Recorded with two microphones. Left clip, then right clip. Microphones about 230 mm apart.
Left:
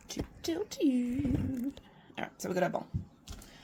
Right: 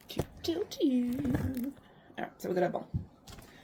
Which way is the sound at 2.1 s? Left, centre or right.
Left.